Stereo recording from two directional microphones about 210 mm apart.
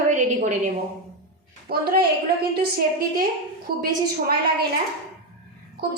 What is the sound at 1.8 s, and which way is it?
A woman's voice, 45° right (ahead or behind).